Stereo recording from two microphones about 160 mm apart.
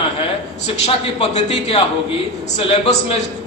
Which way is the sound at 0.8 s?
40° left (ahead or behind).